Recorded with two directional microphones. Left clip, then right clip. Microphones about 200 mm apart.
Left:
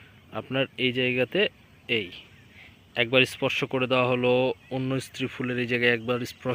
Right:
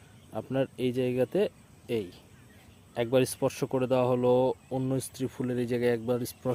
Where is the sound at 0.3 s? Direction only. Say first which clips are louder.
Left 3 dB; 10° right (ahead or behind).